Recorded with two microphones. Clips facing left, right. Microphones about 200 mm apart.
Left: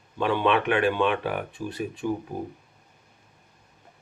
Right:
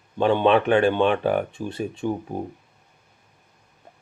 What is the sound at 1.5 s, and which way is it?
Speech, 25° right (ahead or behind).